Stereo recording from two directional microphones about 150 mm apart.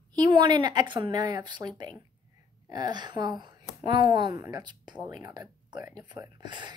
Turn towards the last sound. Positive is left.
turn(degrees=-30)  # may be behind; listen again after turning